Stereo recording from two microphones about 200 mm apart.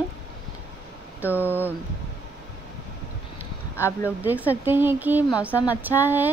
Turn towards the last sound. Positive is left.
turn(degrees=-10)  # may be behind; listen again after turning